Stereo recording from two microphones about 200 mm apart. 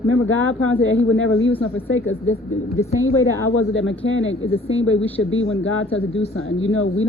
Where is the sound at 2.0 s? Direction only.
85° left.